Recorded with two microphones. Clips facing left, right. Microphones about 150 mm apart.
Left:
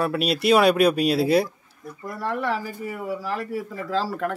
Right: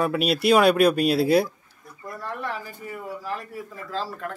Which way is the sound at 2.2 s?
90° left.